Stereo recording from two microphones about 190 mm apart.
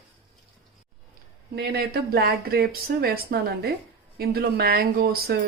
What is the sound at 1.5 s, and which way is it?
Speech, 55° right (ahead or behind).